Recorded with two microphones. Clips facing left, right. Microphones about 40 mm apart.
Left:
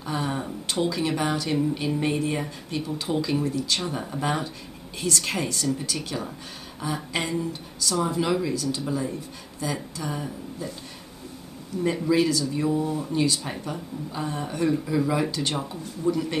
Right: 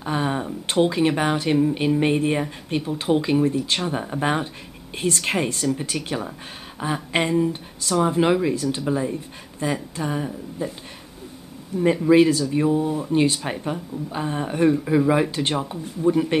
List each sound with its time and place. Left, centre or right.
0.0 s a sound: right
0.7 s speech: right
11.7 s speech: right
12.1 s speech: right
13.1 s speech: right